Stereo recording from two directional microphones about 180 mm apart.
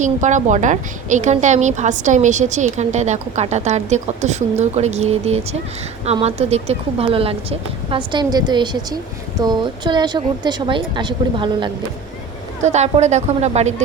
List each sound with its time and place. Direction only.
0.0 s a woman's voice: 45° right (ahead or behind); by 11.7 s 25° right (ahead or behind)
12.6 s a woman's voice: 40° right (ahead or behind)